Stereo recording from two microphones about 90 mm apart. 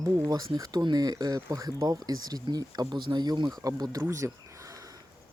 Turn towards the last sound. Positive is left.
turn(degrees=-35)  # may be behind; listen again after turning